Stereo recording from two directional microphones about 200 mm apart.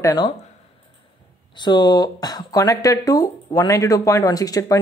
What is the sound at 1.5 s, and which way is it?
Speech, 20° left (ahead or behind).